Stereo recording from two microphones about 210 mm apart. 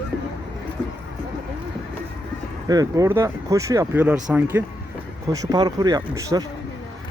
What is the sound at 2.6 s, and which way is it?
Speech, 15° right (ahead or behind).